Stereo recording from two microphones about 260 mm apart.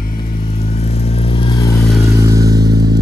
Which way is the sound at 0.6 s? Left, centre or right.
Left.